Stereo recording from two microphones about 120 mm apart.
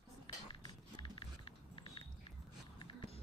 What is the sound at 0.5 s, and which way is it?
Biting, 40° left (ahead or behind).